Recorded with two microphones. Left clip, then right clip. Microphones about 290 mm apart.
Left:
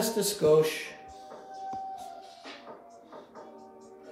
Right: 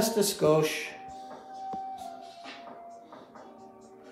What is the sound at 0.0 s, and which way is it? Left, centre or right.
Speech, centre.